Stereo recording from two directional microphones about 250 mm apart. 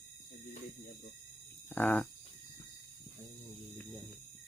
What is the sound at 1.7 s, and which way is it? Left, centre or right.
Speech, centre.